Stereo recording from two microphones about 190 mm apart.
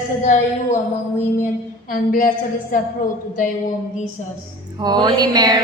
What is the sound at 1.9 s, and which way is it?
Speech, 45° left (ahead or behind).